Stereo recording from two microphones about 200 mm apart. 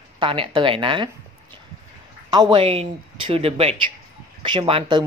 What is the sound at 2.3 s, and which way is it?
Speech, 25° right (ahead or behind).